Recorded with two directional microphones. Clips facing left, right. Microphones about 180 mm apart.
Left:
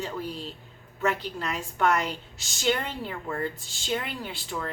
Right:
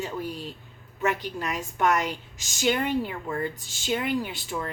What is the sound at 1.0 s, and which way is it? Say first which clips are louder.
A woman's voice: right 1 dB; 15° right (ahead or behind).